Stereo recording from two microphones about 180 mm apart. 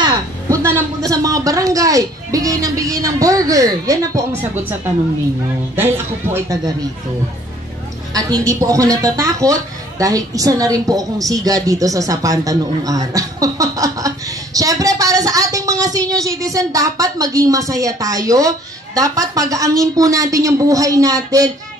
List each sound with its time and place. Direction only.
0.0 s speech: 15° right (ahead or behind)
5.8 s speech: 15° right (ahead or behind)
8.1 s a woman's voice: 20° right (ahead or behind)